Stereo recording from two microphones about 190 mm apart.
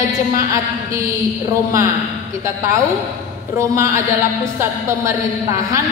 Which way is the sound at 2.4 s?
15° right (ahead or behind).